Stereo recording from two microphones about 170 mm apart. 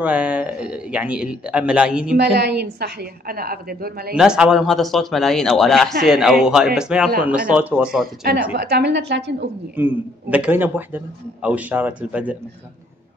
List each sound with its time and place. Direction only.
0.0 s speech: 5° right (ahead or behind)
2.3 s a woman's voice: 80° right; by 4.1 s 60° right (ahead or behind)
4.1 s a man's voice: 5° right (ahead or behind)
8.2 s a woman's voice: 65° right (ahead or behind)
8.5 s a woman's voice: 80° right
9.8 s speech: 10° right (ahead or behind)